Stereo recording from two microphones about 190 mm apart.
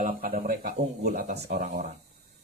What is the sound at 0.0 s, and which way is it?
Speech, 45° right (ahead or behind).